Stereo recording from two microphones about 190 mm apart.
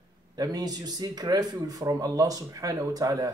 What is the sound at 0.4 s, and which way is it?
Speech, 20° right (ahead or behind).